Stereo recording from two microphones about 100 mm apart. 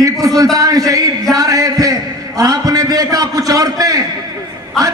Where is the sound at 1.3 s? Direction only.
35° right (ahead or behind).